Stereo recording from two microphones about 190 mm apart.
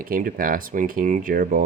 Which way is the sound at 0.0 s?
45° right (ahead or behind).